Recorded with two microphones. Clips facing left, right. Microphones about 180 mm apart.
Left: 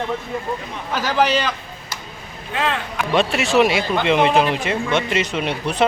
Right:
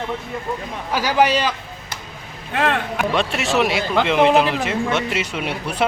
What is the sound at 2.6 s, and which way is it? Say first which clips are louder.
Speech: right 3 dB; 55° right (ahead or behind).